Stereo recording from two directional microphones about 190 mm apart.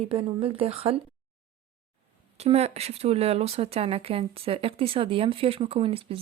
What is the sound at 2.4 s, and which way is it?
Speech, 35° right (ahead or behind).